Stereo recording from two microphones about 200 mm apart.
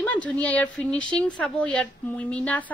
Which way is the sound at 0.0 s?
5° left (ahead or behind).